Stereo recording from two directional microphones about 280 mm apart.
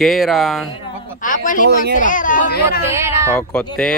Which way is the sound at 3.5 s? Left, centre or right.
Centre.